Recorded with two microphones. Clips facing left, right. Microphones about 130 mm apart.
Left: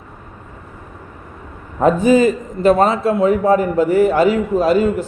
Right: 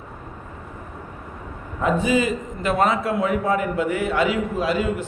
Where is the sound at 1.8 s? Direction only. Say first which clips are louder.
Left 8 dB; 40° left (ahead or behind).